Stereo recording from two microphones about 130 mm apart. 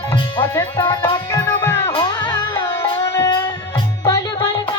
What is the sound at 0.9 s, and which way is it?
Music, 35° left (ahead or behind).